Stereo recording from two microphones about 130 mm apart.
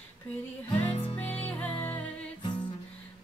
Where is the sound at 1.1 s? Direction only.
10° left (ahead or behind).